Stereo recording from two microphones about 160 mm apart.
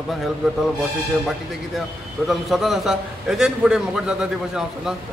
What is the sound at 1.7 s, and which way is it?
A man's voice, centre (ahead or behind).